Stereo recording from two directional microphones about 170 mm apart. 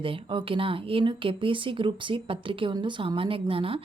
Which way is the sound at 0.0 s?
30° right (ahead or behind).